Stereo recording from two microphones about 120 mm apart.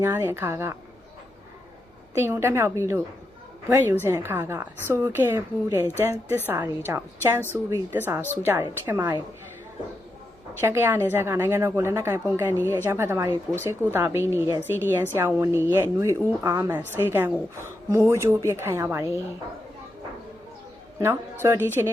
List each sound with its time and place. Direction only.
0.0 s a woman's voice: 20° right (ahead or behind)
2.1 s a woman's voice: 20° right (ahead or behind)
10.6 s a woman's voice: 20° right (ahead or behind)
21.4 s a woman's voice: 20° right (ahead or behind)